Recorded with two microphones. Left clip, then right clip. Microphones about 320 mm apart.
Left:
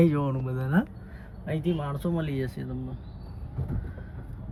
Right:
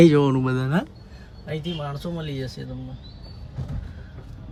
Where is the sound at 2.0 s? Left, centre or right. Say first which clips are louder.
Left 1 dB; centre.